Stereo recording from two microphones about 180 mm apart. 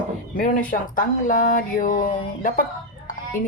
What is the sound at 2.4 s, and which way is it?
Chicken, 45° left (ahead or behind).